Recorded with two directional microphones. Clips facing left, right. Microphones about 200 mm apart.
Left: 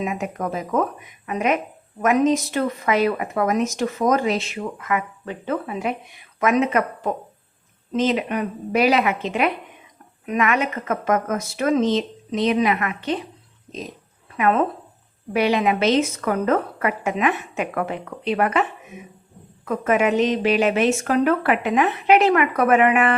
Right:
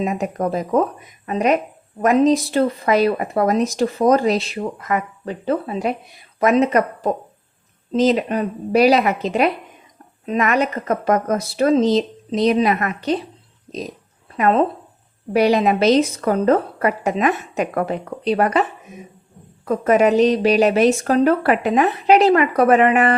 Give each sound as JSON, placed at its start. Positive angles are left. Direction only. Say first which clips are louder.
{"t": 0.0, "sound": "speech", "louder": "right 4 dB", "side_deg": -35}
{"t": 14.3, "sound": "speech", "louder": "right 3 dB", "side_deg": -40}
{"t": 19.6, "sound": "speech", "louder": "right 4 dB", "side_deg": -35}